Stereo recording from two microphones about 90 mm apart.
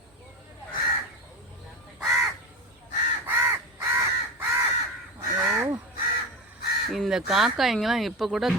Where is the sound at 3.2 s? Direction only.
25° right (ahead or behind).